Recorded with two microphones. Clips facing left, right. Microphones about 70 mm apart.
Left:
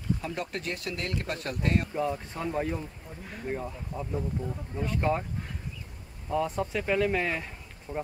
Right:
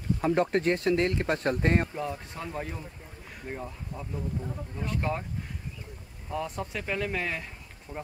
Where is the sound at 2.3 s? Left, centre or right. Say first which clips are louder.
Left 5 dB; centre.